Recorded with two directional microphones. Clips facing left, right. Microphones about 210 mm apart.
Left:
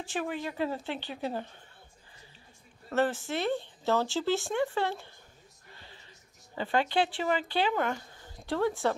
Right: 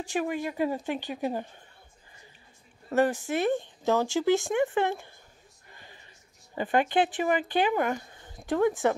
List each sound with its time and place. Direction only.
0.0 s speech: 15° right (ahead or behind)
2.9 s speech: 15° right (ahead or behind)
5.7 s a sound: 15° right (ahead or behind)
6.5 s speech: 15° right (ahead or behind)